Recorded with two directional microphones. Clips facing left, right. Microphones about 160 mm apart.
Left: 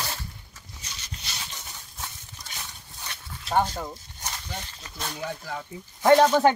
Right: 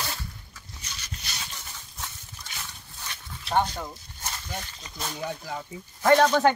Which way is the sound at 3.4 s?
5° left (ahead or behind).